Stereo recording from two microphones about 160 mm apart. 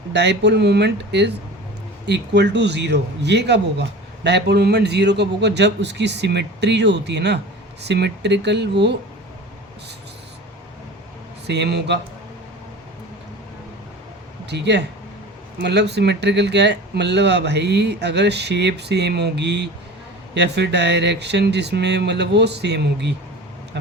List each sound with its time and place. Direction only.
0.1 s a man's voice: 90° right
11.4 s a man's voice: 90° right
14.5 s a man's voice: 90° right